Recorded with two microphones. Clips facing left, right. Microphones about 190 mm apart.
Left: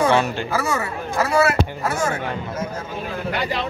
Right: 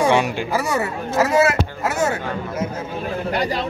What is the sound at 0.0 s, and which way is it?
Speech, 15° right (ahead or behind).